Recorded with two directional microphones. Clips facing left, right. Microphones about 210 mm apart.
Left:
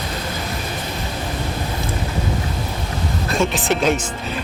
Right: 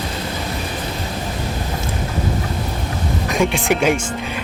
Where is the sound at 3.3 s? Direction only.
15° right (ahead or behind).